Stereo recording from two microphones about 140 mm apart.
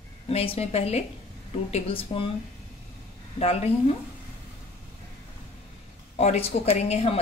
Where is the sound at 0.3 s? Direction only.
45° left (ahead or behind).